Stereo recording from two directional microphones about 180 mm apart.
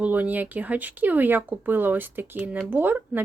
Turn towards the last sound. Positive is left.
turn(degrees=-10)  # may be behind; listen again after turning